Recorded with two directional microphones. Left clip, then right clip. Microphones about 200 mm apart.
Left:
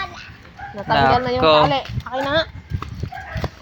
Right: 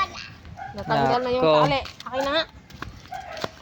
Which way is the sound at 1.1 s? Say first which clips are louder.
Left 4 dB; 40° left (ahead or behind).